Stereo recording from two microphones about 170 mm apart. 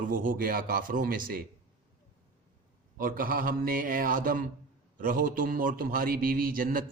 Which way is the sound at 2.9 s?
55° right (ahead or behind).